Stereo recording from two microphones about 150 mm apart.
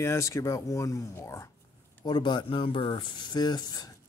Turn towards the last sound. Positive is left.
turn(degrees=25)  # may be behind; listen again after turning